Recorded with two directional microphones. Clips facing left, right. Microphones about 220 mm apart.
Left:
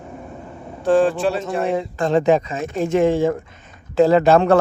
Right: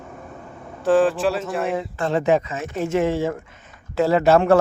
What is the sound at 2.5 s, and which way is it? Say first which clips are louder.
Speech: left 3 dB; 30° left (ahead or behind).